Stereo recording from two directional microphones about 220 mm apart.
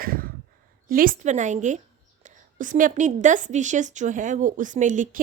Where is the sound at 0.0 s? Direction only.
40° right (ahead or behind).